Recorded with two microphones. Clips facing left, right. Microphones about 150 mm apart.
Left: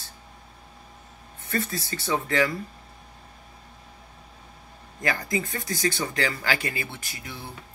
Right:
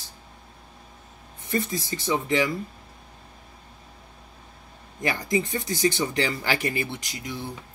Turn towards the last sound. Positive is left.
turn(degrees=-15)  # may be behind; listen again after turning